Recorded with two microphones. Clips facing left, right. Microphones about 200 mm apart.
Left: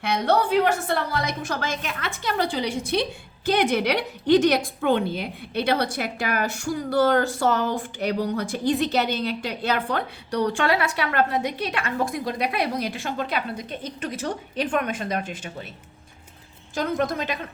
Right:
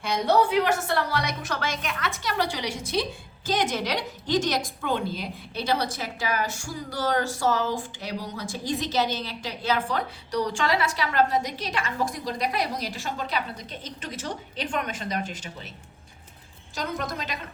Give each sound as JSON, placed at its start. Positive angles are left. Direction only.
{"t": 0.0, "sound": "a woman's voice", "side_deg": 60}
{"t": 16.7, "sound": "a woman's voice", "side_deg": 50}